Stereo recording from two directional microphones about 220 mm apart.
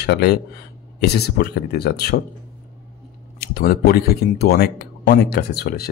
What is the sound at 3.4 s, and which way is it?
Speech, 45° left (ahead or behind).